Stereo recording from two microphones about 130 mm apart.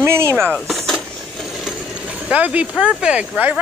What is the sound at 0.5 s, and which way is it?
Vehicle, 5° left (ahead or behind).